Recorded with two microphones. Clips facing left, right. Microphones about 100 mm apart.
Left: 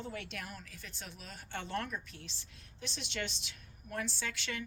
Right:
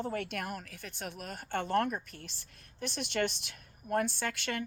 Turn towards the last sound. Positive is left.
turn(degrees=-50)  # may be behind; listen again after turning